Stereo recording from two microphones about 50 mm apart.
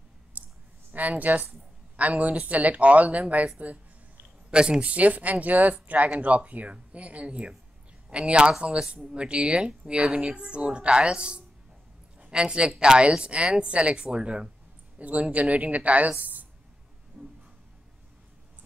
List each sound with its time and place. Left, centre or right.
0.4 s clicking: right
0.9 s a woman's voice: right
4.5 s a woman's voice: centre
9.1 s a woman's voice: right
17.1 s a sound: right